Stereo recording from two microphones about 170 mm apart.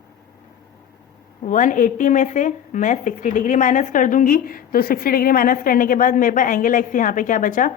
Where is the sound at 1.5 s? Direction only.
50° left (ahead or behind).